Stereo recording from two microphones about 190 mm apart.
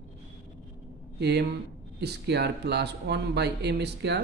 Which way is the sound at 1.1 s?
60° right (ahead or behind).